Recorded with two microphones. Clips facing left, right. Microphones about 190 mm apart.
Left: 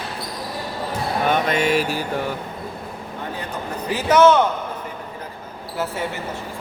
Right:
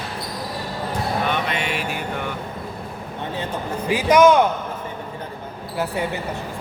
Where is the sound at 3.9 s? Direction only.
10° right (ahead or behind).